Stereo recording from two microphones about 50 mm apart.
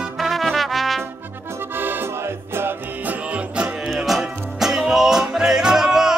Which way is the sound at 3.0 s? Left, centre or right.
Right.